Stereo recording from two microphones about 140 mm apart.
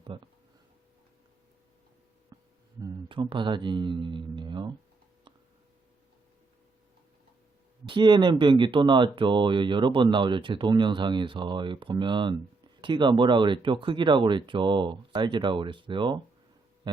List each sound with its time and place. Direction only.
0.1 s speech: 35° right (ahead or behind)
2.3 s a sound: 25° right (ahead or behind)
3.1 s speech: 35° right (ahead or behind)
7.9 s speech: 35° right (ahead or behind)
16.9 s music: 30° right (ahead or behind)